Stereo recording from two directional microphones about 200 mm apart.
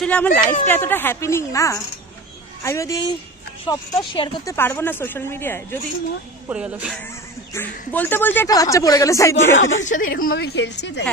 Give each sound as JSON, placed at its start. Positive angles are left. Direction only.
{"t": 0.0, "sound": "speech", "side_deg": 5}
{"t": 4.6, "sound": "speech", "side_deg": 10}
{"t": 6.5, "sound": "speech", "side_deg": -5}
{"t": 7.5, "sound": "speech", "side_deg": 10}
{"t": 9.8, "sound": "a woman's voice", "side_deg": 40}